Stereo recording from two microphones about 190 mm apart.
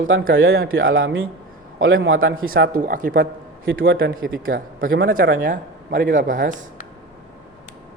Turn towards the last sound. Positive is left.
turn(degrees=-45)  # may be behind; listen again after turning